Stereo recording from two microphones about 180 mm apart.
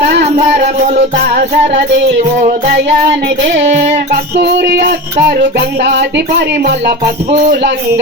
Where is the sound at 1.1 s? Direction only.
55° right (ahead or behind).